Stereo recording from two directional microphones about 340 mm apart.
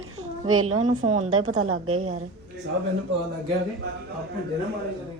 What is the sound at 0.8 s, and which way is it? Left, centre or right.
Speech, right.